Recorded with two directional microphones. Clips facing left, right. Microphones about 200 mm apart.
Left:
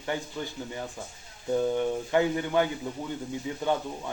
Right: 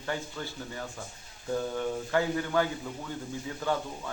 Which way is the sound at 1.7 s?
20° left (ahead or behind).